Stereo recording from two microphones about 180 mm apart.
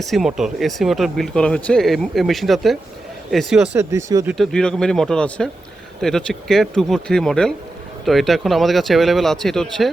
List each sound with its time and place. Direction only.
0.0 s speech: centre (ahead or behind)
3.8 s speech: 15° right (ahead or behind)
4.3 s speech: 5° left (ahead or behind)